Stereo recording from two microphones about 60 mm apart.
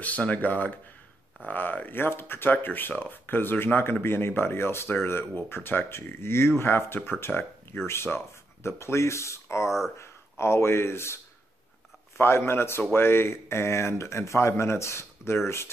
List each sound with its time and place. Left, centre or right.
0.0 s speech: left
12.2 s speech: left